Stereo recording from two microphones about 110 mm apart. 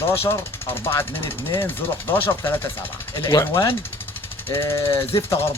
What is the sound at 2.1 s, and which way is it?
Speech, 20° left (ahead or behind).